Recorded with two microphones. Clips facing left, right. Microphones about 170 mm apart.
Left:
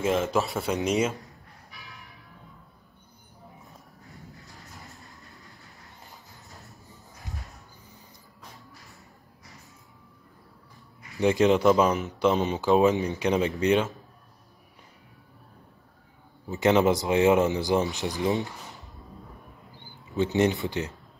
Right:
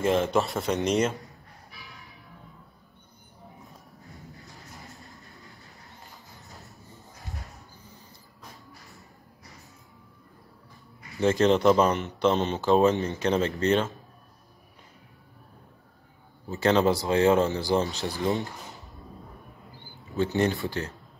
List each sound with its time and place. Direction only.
0.0 s speech: 5° left (ahead or behind)
3.6 s a sound: centre (ahead or behind)
4.7 s vehicle: centre (ahead or behind)
7.8 s a sound: 20° left (ahead or behind)
11.1 s speech: 15° left (ahead or behind)
16.4 s speech: 15° left (ahead or behind)
19.8 s speech: 20° left (ahead or behind)